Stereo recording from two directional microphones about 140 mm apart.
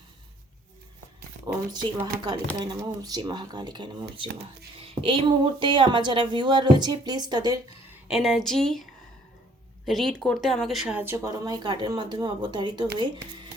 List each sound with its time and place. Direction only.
1.7 s a woman's voice: 30° right (ahead or behind)
8.0 s speech: 5° right (ahead or behind)
9.8 s speech: centre (ahead or behind)
11.0 s a woman's voice: 20° right (ahead or behind)